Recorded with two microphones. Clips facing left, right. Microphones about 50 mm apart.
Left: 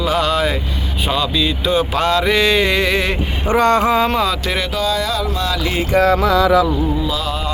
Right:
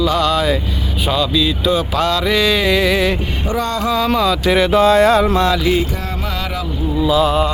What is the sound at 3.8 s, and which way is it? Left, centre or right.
Speech, left.